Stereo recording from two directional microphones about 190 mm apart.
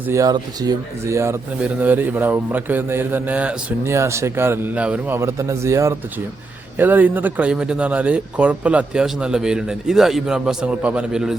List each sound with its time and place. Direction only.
0.1 s speech: 20° right (ahead or behind); by 11.3 s 5° right (ahead or behind)